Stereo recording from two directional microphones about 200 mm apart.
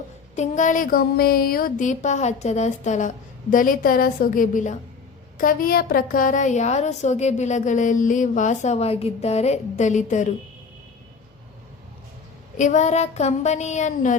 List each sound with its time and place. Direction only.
0.3 s a woman's voice: 35° left (ahead or behind)
12.5 s a woman's voice: 35° left (ahead or behind)